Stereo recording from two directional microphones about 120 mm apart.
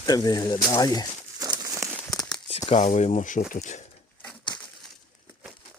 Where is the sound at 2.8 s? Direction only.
80° left.